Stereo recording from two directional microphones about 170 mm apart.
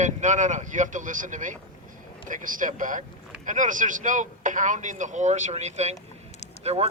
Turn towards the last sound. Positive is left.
turn(degrees=-35)  # may be behind; listen again after turning